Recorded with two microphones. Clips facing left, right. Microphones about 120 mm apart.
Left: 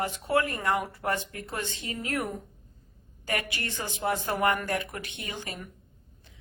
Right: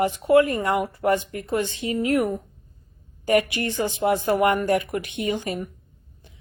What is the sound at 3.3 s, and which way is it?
Speech, 15° right (ahead or behind).